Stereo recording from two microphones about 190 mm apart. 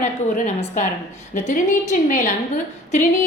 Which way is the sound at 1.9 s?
45° left (ahead or behind).